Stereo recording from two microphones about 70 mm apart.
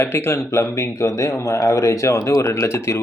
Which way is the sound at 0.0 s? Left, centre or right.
Left.